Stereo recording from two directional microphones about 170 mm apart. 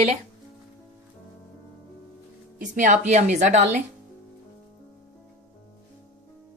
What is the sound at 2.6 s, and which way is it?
A woman's voice, 45° right (ahead or behind).